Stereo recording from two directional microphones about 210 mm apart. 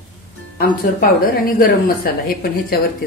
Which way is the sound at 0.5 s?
45° left (ahead or behind).